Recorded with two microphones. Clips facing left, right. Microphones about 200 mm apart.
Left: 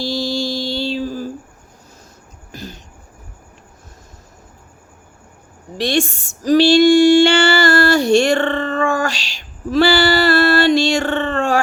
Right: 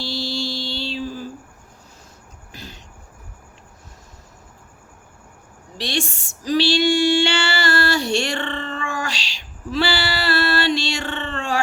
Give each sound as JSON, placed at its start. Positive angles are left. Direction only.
{"t": 0.0, "sound": "music", "side_deg": 45}
{"t": 2.5, "sound": "a sound", "side_deg": 45}
{"t": 5.7, "sound": "female singing", "side_deg": 45}